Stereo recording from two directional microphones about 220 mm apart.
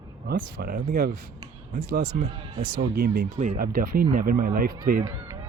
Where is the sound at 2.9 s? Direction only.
45° right (ahead or behind).